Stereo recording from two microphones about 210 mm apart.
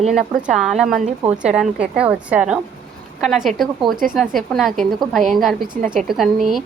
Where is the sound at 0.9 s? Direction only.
35° right (ahead or behind).